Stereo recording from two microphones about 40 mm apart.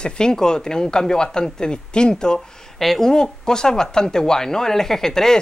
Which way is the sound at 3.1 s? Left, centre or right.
Centre.